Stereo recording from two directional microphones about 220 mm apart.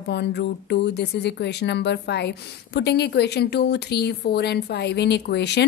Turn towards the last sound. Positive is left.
turn(degrees=50)  # may be behind; listen again after turning